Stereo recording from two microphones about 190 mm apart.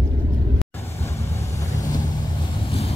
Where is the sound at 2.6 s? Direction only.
30° left (ahead or behind).